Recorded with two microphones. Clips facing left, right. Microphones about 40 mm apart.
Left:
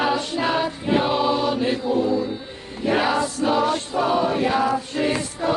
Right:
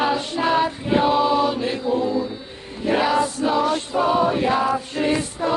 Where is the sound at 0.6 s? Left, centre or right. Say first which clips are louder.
Right 2 dB; centre.